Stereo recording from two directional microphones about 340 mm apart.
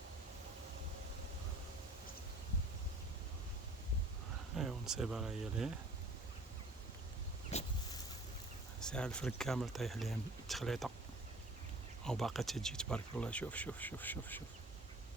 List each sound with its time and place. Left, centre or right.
4.5 s speech: centre
7.5 s vehicle: centre
8.8 s speech: centre
12.0 s speech: centre